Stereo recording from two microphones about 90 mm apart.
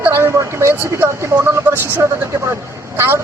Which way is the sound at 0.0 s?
30° right (ahead or behind).